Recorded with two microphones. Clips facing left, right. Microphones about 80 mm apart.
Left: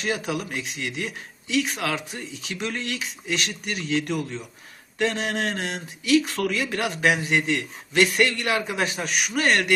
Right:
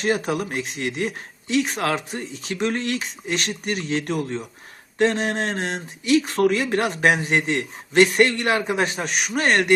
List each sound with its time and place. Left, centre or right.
0.0 s speech: right